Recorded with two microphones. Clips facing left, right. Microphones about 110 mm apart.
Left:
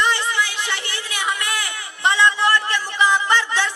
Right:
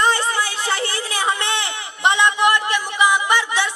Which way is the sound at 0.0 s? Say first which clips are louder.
Right 2 dB; 40° right (ahead or behind).